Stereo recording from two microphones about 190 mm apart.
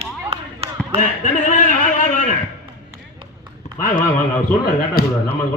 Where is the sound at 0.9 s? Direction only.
40° left (ahead or behind).